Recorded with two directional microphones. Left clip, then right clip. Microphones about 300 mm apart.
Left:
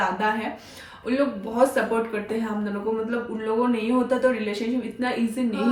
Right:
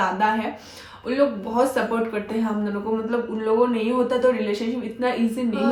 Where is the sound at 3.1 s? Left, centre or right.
Centre.